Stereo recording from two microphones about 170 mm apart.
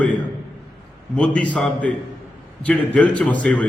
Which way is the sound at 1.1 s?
5° left (ahead or behind).